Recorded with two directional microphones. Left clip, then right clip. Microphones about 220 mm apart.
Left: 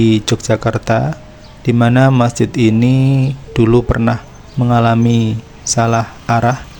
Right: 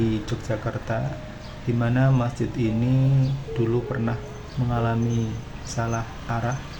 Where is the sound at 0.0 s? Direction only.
50° left (ahead or behind).